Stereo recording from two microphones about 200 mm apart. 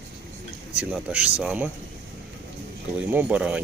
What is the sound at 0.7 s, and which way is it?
Speech, 5° right (ahead or behind).